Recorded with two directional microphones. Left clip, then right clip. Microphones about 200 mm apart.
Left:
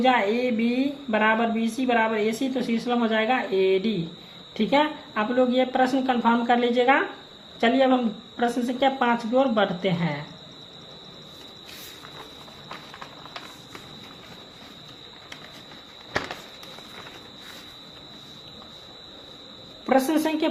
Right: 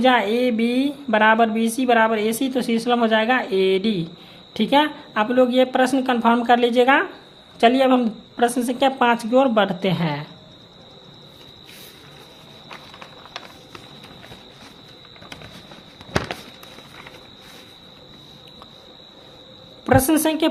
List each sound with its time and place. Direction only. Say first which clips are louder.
0.0 s a woman's voice: right 4 dB; 45° right (ahead or behind)
19.9 s a woman's voice: right 4 dB; 40° right (ahead or behind)